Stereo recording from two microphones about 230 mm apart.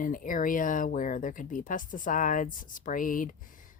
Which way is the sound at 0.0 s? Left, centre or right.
Left.